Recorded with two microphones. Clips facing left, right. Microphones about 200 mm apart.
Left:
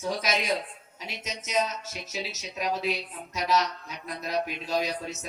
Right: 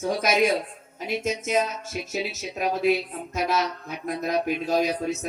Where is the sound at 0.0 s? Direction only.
50° right (ahead or behind).